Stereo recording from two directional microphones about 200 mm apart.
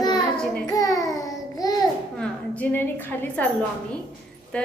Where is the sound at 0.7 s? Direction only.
15° left (ahead or behind).